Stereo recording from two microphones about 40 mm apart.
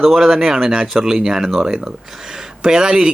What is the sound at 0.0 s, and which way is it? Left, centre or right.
Speech, centre.